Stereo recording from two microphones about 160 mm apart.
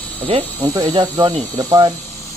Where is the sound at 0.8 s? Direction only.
30° right (ahead or behind).